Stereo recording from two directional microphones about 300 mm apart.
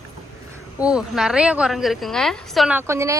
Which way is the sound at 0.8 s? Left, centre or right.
Centre.